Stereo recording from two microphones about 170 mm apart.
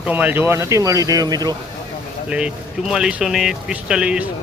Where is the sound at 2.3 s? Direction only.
5° right (ahead or behind).